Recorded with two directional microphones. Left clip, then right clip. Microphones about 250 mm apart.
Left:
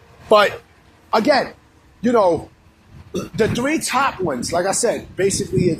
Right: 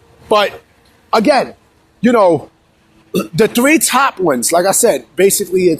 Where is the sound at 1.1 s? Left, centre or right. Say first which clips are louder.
Right 5 dB; right.